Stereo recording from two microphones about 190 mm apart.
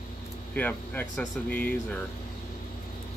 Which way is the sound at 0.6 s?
10° left (ahead or behind).